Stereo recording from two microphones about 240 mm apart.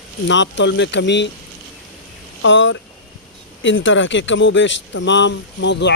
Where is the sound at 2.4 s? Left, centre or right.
Left.